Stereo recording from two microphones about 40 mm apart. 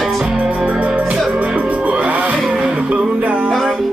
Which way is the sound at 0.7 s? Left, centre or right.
Right.